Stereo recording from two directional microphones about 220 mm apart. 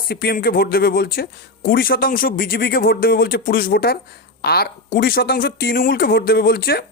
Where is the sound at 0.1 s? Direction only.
45° left (ahead or behind).